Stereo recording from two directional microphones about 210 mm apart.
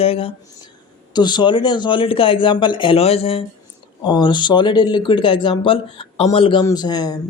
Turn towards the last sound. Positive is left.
turn(degrees=20)  # may be behind; listen again after turning